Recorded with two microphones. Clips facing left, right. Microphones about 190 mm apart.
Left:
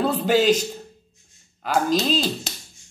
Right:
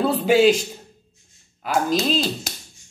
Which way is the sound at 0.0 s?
5° right (ahead or behind).